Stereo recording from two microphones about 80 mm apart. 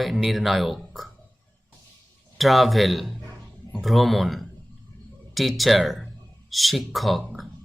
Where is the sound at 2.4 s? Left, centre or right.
Centre.